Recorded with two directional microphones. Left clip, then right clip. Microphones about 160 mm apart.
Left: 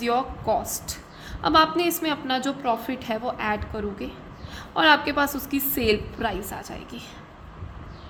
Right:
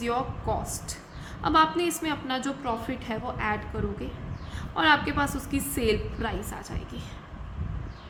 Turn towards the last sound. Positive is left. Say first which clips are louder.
# left 3 dB
turn(degrees=40)  # may be behind; listen again after turning